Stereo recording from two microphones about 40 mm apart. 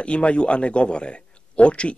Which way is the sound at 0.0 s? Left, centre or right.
Left.